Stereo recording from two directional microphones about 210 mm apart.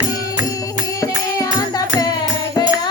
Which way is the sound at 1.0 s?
15° left (ahead or behind).